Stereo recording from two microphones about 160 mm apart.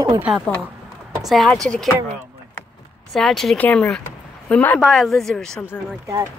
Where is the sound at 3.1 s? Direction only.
Centre (ahead or behind).